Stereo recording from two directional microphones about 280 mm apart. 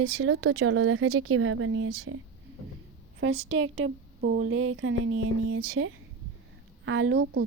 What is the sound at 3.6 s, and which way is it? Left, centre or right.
Speech, right.